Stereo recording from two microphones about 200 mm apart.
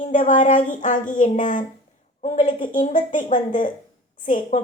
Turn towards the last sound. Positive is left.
turn(degrees=40)  # may be behind; listen again after turning